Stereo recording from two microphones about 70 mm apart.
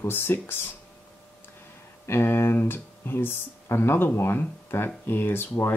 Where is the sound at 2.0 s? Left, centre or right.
Left.